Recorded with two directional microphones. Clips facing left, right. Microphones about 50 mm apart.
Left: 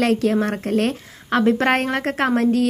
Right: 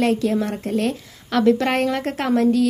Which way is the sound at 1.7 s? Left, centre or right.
Left.